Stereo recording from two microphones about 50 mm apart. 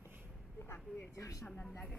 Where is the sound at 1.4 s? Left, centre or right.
Left.